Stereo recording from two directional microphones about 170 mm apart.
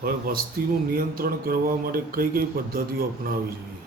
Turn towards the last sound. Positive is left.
turn(degrees=-60)  # may be behind; listen again after turning